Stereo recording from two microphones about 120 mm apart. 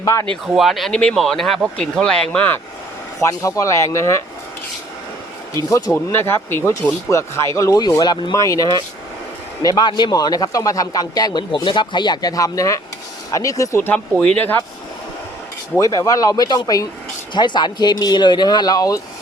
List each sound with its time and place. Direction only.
0.0 s speech: 30° left (ahead or behind)
0.4 s speech: centre (ahead or behind)
3.2 s speech: 25° left (ahead or behind)
6.1 s a man's voice: 20° left (ahead or behind)
13.9 s speech: 10° left (ahead or behind)
15.8 s a man's voice: 30° left (ahead or behind)